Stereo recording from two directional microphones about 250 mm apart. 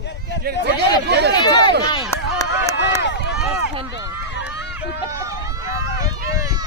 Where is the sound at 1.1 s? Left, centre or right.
Right.